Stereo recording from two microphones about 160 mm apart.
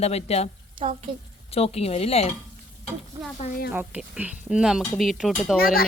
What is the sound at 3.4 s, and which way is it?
Speech, 50° left (ahead or behind).